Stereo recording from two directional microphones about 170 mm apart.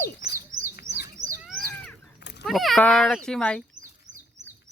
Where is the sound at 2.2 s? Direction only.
85° left.